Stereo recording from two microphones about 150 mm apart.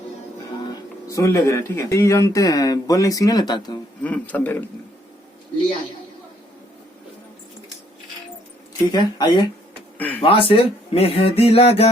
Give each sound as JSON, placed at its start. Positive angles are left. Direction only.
{"t": 0.7, "sound": "speech", "side_deg": 20}
{"t": 4.0, "sound": "speech", "side_deg": 10}
{"t": 8.9, "sound": "speech", "side_deg": 30}
{"t": 10.0, "sound": "speech", "side_deg": 10}
{"t": 10.2, "sound": "speech", "side_deg": 40}